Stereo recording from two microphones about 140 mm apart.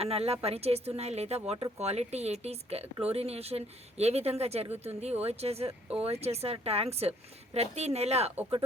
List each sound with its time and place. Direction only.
0.0 s speech: 45° right (ahead or behind)